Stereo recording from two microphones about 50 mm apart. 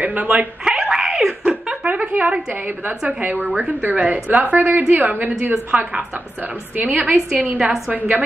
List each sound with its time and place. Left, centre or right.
0.0 s speech: right
0.7 s music: centre
1.4 s a sound: centre
1.9 s a sound: right
3.1 s a woman's voice: right
5.4 s speech: right
6.8 s a woman's voice: right